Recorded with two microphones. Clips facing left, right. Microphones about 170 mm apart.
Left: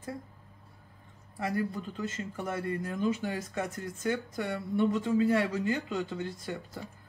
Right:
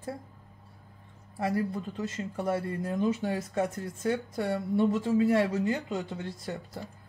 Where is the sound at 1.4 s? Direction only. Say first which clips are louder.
Right 2 dB; 25° right (ahead or behind).